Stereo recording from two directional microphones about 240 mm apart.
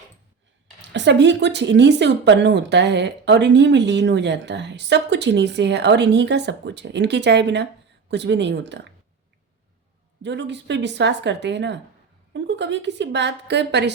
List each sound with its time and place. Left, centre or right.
0.8 s speech: right
10.2 s speech: right